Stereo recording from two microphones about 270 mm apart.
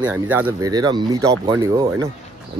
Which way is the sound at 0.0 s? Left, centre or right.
Centre.